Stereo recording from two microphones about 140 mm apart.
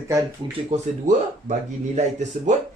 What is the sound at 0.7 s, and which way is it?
Speech, 50° right (ahead or behind).